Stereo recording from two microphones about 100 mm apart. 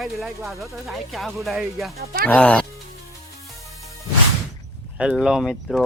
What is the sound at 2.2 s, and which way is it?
Speech, 15° left (ahead or behind).